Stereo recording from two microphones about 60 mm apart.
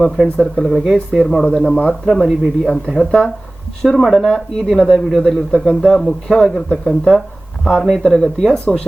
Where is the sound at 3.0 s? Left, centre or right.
Centre.